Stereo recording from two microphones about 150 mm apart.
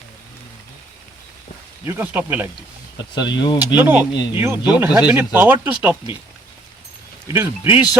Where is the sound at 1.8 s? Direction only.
15° right (ahead or behind).